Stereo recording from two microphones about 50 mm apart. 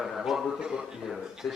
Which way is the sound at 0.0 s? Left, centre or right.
Centre.